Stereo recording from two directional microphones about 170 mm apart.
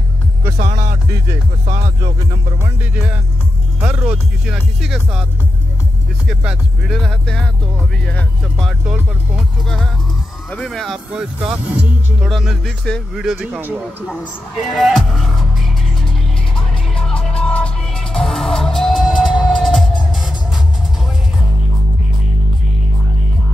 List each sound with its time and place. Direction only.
0.7 s speech: 55° right (ahead or behind)
2.6 s music: 10° right (ahead or behind)
3.8 s speech: 10° right (ahead or behind)
6.2 s speech: 5° right (ahead or behind)
10.5 s speech: centre (ahead or behind)
16.5 s music: 5° left (ahead or behind)